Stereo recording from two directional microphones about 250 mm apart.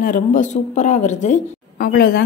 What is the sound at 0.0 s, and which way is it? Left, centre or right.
A woman's voice, left.